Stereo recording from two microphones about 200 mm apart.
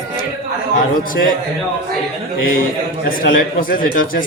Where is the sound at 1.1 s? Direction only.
45° left (ahead or behind).